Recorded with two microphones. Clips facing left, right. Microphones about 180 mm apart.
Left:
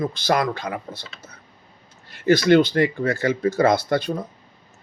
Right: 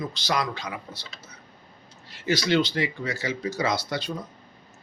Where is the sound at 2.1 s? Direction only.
55° left (ahead or behind).